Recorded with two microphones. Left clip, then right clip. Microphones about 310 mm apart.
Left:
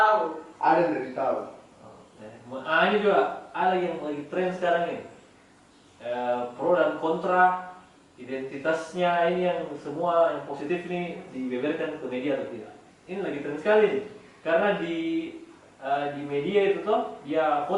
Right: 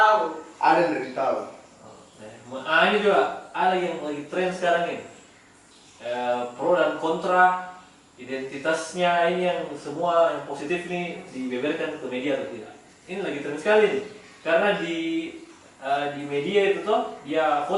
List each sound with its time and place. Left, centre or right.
0.1 s a sound: centre
0.6 s speech: centre
2.6 s speech: centre
7.0 s speech: left
7.3 s speech: centre